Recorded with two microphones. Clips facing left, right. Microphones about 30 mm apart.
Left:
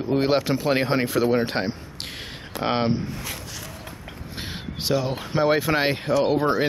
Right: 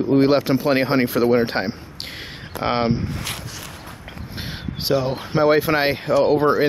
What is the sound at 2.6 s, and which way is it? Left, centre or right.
Speech, centre.